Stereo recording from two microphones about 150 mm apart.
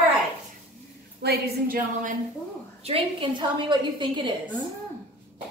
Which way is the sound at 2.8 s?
40° right (ahead or behind).